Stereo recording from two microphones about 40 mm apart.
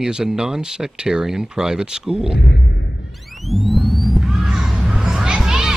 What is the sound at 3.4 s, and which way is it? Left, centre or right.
Rumble, centre.